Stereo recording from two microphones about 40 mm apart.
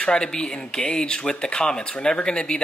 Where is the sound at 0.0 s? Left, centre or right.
Left.